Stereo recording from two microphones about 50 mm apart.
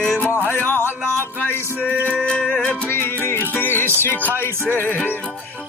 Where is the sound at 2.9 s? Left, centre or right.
Left.